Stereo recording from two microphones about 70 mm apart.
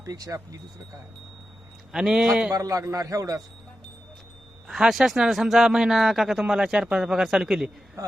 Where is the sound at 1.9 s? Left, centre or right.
Centre.